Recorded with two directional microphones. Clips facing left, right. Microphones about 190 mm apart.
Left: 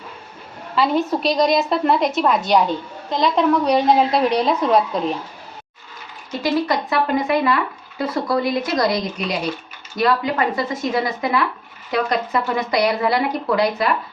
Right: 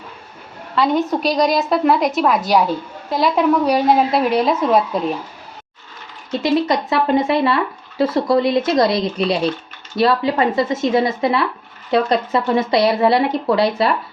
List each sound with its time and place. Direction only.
0.8 s a woman's voice: centre (ahead or behind)
6.4 s speech: 25° right (ahead or behind)